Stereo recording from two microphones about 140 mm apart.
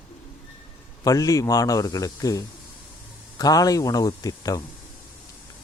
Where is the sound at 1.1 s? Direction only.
25° left (ahead or behind).